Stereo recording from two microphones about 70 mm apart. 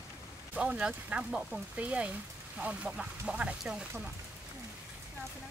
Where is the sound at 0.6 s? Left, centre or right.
Centre.